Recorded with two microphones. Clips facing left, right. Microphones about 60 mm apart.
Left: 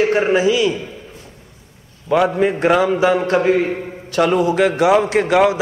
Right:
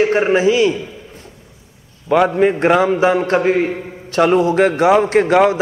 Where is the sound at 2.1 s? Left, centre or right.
Right.